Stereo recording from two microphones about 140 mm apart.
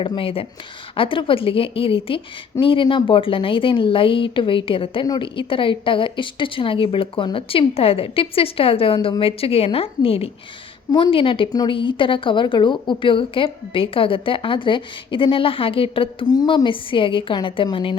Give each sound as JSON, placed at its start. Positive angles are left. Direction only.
{"t": 0.0, "sound": "a woman's voice", "side_deg": 35}